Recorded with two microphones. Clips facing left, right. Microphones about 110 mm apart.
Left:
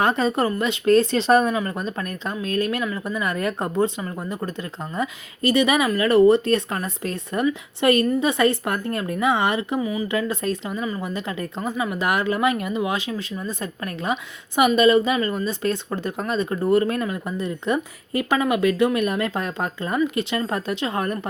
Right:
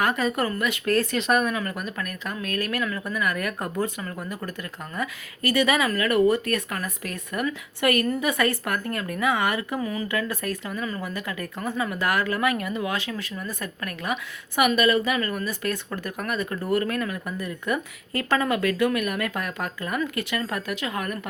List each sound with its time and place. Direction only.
0.0 s speech: 25° left (ahead or behind)
9.8 s speech: 10° left (ahead or behind); by 21.2 s 30° left (ahead or behind)